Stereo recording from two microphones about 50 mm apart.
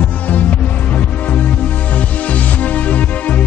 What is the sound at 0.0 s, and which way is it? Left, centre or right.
Music, left.